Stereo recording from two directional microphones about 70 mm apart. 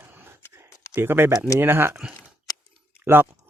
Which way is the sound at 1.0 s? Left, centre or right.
Right.